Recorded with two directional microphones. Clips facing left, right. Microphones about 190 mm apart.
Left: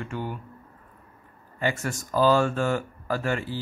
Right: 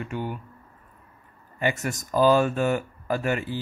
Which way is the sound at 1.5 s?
15° right (ahead or behind).